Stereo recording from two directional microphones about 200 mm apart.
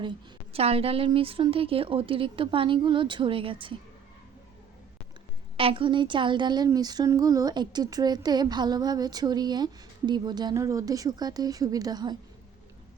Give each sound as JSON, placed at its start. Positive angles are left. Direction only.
{"t": 0.0, "sound": "a woman's voice", "side_deg": -25}
{"t": 5.5, "sound": "a woman's voice", "side_deg": -25}